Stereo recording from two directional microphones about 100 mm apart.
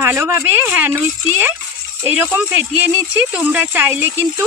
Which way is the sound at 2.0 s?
20° right (ahead or behind).